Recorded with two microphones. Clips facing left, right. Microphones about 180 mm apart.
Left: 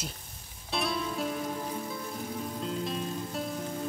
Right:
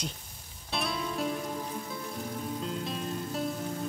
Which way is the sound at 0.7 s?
Centre (ahead or behind).